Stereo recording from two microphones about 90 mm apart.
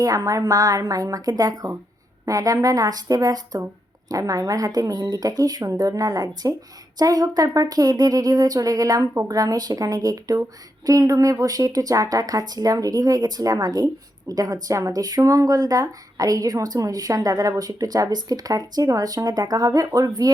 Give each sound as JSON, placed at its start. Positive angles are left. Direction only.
{"t": 0.0, "sound": "speech", "side_deg": -40}